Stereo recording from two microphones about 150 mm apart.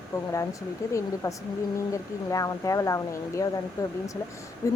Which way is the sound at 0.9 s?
20° left (ahead or behind).